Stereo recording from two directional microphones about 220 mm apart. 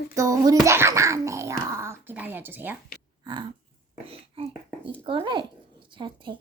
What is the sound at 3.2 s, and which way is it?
Dog, 20° right (ahead or behind).